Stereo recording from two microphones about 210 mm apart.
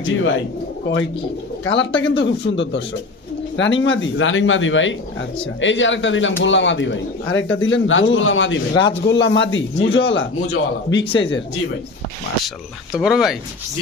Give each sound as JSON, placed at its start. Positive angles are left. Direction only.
{"t": 0.0, "sound": "a man's voice", "side_deg": 65}
{"t": 1.6, "sound": "a man's voice", "side_deg": 60}
{"t": 12.9, "sound": "speech", "side_deg": -5}